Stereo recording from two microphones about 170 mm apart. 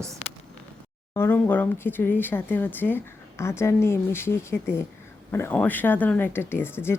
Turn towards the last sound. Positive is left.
turn(degrees=15)  # may be behind; listen again after turning